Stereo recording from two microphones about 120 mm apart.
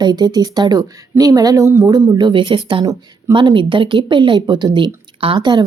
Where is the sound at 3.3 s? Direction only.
45° right (ahead or behind).